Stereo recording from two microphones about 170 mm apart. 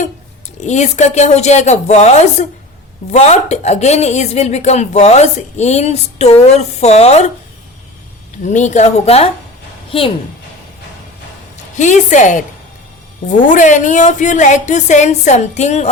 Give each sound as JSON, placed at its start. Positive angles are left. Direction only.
{"t": 0.6, "sound": "speech", "side_deg": 40}
{"t": 8.4, "sound": "speech", "side_deg": 45}
{"t": 11.8, "sound": "a woman's voice", "side_deg": 45}
{"t": 13.5, "sound": "a woman's voice", "side_deg": 45}